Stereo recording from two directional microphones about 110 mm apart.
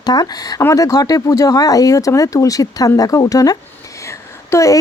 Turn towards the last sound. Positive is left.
turn(degrees=30)  # may be behind; listen again after turning